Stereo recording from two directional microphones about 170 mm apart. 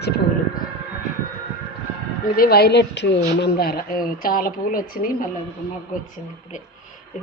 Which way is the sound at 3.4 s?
65° left (ahead or behind).